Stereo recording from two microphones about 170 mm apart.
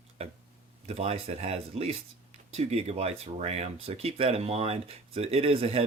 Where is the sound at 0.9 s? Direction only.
35° right (ahead or behind).